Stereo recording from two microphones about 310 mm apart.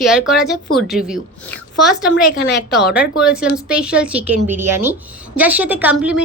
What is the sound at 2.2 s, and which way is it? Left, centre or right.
Speech, left.